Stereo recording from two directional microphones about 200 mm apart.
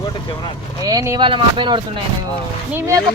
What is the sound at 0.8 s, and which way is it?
Speech, 15° right (ahead or behind).